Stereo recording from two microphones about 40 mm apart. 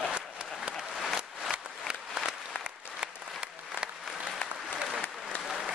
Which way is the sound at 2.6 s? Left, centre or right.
Right.